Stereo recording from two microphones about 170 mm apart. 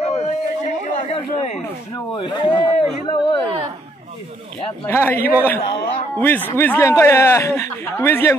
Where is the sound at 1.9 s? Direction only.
30° left (ahead or behind).